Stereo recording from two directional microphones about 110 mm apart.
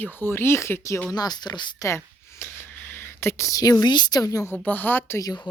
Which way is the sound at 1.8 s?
25° left (ahead or behind).